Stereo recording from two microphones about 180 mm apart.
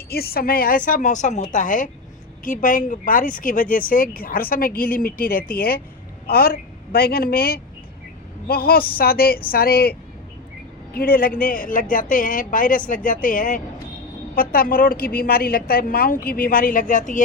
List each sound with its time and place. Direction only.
0.1 s a woman's voice: 60° left (ahead or behind)